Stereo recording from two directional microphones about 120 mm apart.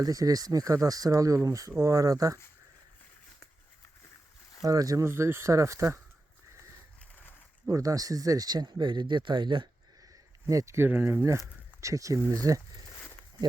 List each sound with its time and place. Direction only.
0.0 s speech: 30° right (ahead or behind)
4.6 s speech: 30° right (ahead or behind)
7.7 s speech: 30° right (ahead or behind)
10.4 s speech: 25° right (ahead or behind)